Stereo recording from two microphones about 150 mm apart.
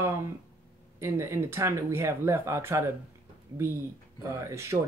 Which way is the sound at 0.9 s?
15° right (ahead or behind).